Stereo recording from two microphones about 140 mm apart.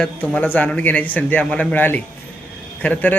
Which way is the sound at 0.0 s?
5° left (ahead or behind).